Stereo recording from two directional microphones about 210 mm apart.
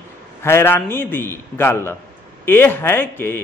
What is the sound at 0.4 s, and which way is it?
A man's voice, 10° left (ahead or behind).